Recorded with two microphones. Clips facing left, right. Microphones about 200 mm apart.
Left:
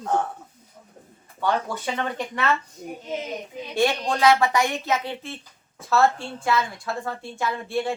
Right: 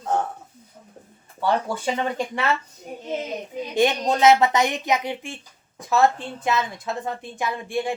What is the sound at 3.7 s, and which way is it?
A woman's voice, 20° right (ahead or behind).